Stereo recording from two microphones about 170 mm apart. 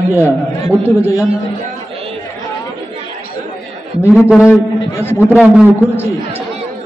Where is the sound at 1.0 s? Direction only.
15° left (ahead or behind).